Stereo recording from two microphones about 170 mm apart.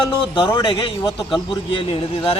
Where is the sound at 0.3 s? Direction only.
30° left (ahead or behind).